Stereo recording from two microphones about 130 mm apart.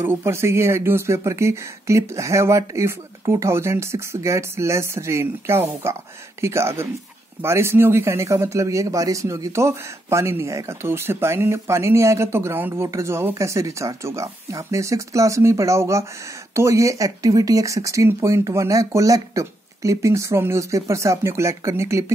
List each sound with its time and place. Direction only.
0.0 s speech: 20° right (ahead or behind)